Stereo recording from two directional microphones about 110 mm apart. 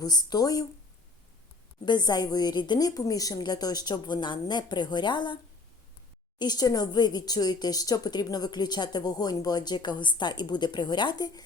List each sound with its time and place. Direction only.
0.0 s speech: 35° left (ahead or behind)
1.8 s speech: 40° left (ahead or behind)
6.4 s speech: 35° left (ahead or behind)